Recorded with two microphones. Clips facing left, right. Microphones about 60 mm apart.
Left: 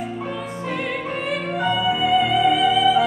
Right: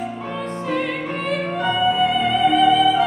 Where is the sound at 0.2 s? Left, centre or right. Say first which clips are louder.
Right 1 dB; centre.